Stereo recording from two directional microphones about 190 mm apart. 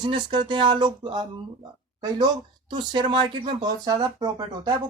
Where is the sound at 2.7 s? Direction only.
25° right (ahead or behind).